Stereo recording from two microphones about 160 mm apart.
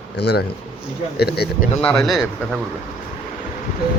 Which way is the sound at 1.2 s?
85° left.